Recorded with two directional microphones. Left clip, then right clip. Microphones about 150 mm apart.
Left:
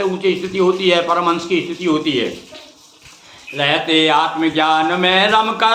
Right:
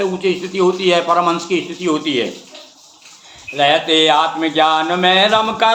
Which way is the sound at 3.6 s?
25° right (ahead or behind).